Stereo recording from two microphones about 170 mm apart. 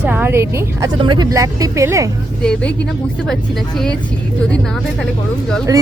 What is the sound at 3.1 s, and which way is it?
Speech, 5° left (ahead or behind).